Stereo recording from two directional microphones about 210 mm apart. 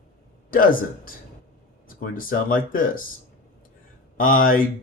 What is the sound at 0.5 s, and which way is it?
Speech, 40° left (ahead or behind).